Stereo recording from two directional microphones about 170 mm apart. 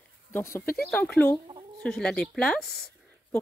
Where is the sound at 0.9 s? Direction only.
5° left (ahead or behind).